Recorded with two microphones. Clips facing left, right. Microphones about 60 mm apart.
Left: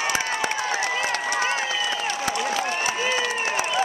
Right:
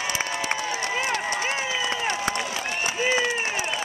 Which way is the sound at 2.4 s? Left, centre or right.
Left.